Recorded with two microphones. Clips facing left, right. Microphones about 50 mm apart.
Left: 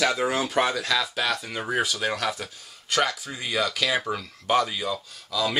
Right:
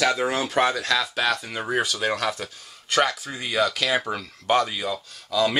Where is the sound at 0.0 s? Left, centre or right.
Centre.